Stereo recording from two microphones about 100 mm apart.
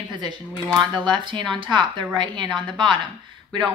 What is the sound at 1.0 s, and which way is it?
A woman's voice, 50° right (ahead or behind).